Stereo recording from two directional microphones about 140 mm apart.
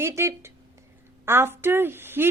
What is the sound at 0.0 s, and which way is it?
A woman's voice, 20° right (ahead or behind).